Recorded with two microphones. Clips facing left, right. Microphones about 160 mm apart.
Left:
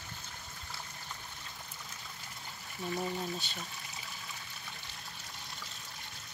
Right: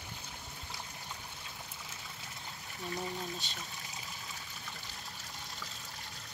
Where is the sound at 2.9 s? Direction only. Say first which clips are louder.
Left 3 dB; centre (ahead or behind).